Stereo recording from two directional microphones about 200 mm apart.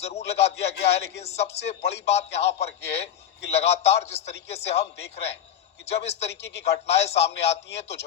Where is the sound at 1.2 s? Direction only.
30° left (ahead or behind).